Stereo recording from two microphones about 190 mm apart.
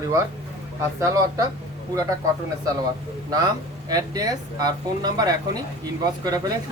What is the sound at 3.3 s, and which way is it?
Speech, 20° right (ahead or behind).